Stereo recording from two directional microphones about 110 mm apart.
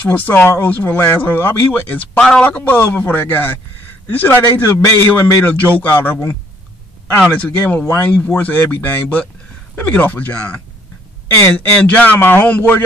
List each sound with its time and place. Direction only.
0.1 s speech: 15° left (ahead or behind)
4.5 s a man's voice: 30° left (ahead or behind)
5.4 s speech: 15° left (ahead or behind)
7.2 s speech: 10° left (ahead or behind)